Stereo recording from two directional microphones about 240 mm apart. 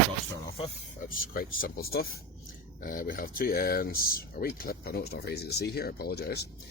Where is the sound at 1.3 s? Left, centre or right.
Left.